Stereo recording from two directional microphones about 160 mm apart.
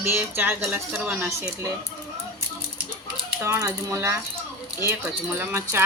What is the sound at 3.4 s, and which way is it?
Speech, 15° right (ahead or behind).